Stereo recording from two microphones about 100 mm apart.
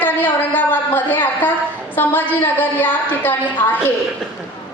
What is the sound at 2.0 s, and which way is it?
A woman's voice, 20° left (ahead or behind).